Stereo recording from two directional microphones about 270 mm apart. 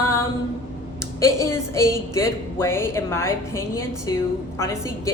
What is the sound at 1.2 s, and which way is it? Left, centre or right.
A woman's voice, centre.